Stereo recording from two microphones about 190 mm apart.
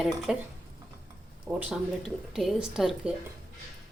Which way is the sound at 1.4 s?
10° right (ahead or behind).